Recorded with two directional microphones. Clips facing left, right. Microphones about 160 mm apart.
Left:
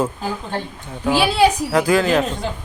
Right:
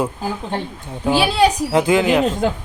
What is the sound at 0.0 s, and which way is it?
Speech, 15° right (ahead or behind).